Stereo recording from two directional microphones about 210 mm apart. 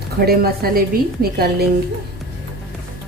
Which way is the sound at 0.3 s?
45° right (ahead or behind).